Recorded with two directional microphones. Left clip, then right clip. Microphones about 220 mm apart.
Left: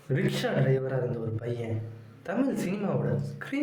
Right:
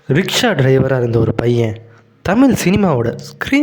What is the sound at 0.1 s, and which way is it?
A woman's voice, 45° right (ahead or behind).